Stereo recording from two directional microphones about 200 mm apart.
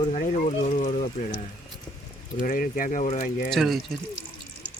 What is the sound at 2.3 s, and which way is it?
Speech, 45° left (ahead or behind).